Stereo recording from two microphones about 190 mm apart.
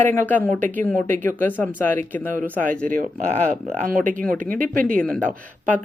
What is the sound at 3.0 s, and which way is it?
Speech, 40° right (ahead or behind).